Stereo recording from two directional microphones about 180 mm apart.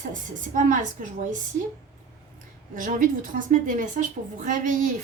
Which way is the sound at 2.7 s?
50° right (ahead or behind).